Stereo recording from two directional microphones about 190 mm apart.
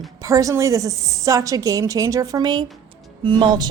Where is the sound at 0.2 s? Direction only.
15° right (ahead or behind).